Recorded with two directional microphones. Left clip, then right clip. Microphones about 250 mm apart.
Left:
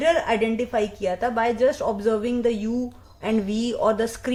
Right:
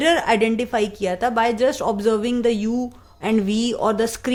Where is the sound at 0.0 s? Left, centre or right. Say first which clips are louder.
Right 3 dB; right.